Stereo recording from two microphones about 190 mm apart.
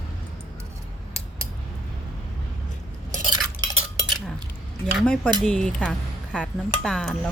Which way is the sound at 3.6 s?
20° right (ahead or behind).